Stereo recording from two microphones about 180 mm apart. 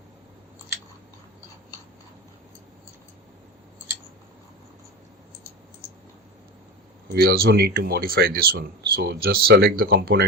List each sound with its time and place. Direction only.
7.1 s speech: 60° right (ahead or behind)